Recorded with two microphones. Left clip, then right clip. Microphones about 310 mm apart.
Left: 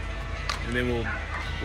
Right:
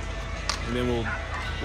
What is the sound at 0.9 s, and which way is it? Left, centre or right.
Fowl, right.